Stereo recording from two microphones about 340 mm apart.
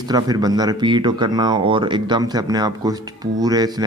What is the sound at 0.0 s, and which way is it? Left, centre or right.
Speech, centre.